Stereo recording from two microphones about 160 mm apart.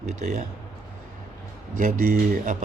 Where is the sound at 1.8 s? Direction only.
55° right (ahead or behind).